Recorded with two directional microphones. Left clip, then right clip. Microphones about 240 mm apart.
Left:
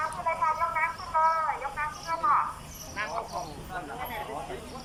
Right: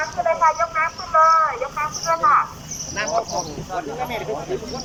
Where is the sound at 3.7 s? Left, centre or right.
Right.